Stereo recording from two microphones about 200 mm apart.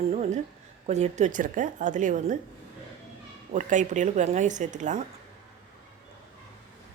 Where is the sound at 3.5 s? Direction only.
35° right (ahead or behind).